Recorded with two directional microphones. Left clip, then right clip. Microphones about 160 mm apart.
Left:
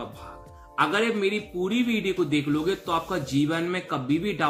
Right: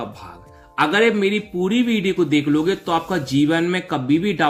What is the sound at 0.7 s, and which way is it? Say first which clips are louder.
Speech: right 7 dB; 35° right (ahead or behind).